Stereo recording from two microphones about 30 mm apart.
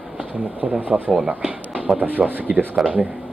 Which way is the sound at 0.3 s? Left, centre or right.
Right.